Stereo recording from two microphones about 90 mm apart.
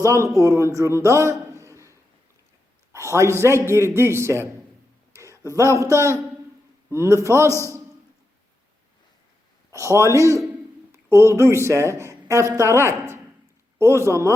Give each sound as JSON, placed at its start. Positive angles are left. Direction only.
{"t": 0.0, "sound": "a man's voice", "side_deg": -35}
{"t": 1.6, "sound": "a sound", "side_deg": -35}
{"t": 2.9, "sound": "a man's voice", "side_deg": -35}
{"t": 9.8, "sound": "a man's voice", "side_deg": -35}